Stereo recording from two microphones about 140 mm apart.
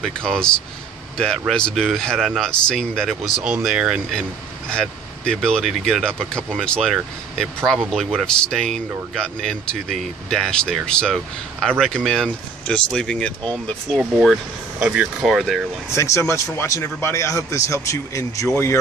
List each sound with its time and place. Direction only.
0.0 s a man's voice: 5° left (ahead or behind)
15.9 s speech: 20° left (ahead or behind)